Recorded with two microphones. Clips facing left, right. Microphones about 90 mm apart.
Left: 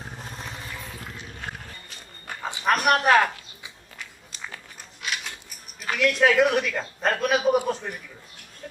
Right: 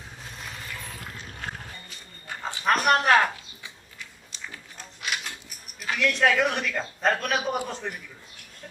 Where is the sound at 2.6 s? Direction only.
5° left (ahead or behind).